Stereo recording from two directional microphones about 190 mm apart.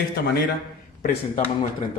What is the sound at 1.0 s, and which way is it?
Speech, 40° left (ahead or behind).